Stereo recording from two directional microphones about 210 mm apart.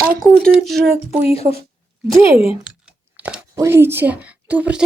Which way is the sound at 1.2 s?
30° left (ahead or behind).